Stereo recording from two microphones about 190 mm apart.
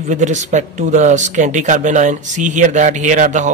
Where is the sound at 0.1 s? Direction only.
40° right (ahead or behind).